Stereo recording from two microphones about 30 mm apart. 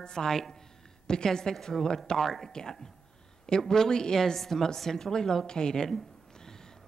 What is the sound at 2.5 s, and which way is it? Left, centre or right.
A woman's voice, left.